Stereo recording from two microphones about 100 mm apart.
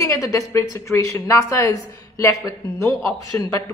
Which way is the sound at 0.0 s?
35° left (ahead or behind).